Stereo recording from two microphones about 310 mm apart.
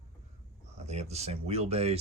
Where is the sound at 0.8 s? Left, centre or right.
Right.